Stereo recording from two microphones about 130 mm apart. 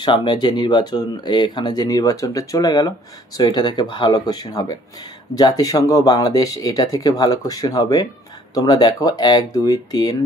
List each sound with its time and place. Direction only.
0.0 s speech: 35° left (ahead or behind)